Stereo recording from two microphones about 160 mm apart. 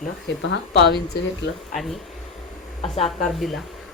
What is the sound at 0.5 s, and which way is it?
Speech, 90° left.